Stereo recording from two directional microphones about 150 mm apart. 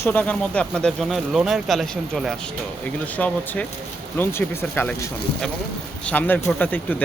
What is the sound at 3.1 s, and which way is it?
Speech, 10° left (ahead or behind).